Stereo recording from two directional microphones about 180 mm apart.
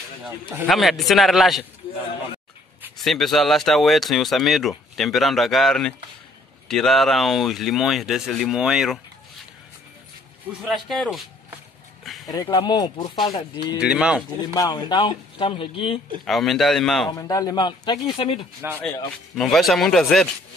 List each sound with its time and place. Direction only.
0.2 s a man's voice: 10° right (ahead or behind)
0.7 s speech: centre (ahead or behind)
3.0 s speech: centre (ahead or behind)
10.9 s speech: centre (ahead or behind)
12.0 s a sound: centre (ahead or behind)
12.3 s speech: 20° left (ahead or behind)
13.7 s speech: 5° right (ahead or behind)
14.4 s speech: 20° left (ahead or behind)
16.3 s speech: centre (ahead or behind)
17.1 s speech: 20° left (ahead or behind)
18.8 s speech: 15° left (ahead or behind)
19.3 s speech: centre (ahead or behind)